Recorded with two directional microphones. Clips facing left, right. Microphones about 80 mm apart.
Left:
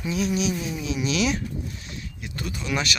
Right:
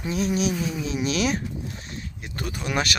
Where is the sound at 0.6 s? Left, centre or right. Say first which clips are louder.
Right 1 dB; right.